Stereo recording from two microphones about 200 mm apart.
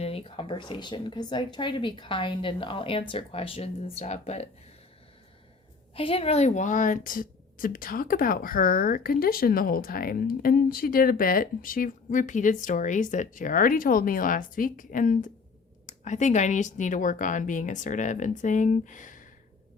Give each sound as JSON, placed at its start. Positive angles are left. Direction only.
{"t": 0.0, "sound": "speech", "side_deg": 30}
{"t": 5.9, "sound": "a woman's voice", "side_deg": 30}